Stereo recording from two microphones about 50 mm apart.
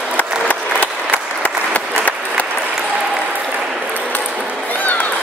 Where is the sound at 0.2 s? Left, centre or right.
Left.